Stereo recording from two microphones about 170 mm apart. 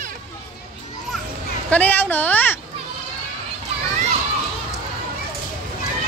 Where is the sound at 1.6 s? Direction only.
10° left (ahead or behind).